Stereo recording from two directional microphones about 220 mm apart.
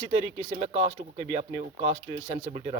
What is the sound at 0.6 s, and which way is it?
Speech, 30° right (ahead or behind).